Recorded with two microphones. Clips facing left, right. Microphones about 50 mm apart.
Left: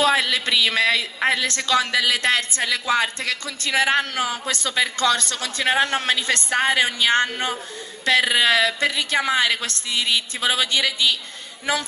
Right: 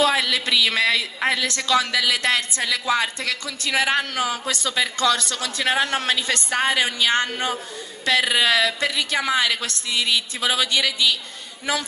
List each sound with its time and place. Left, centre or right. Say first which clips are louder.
0.0 s a woman's voice: left 1 dB; left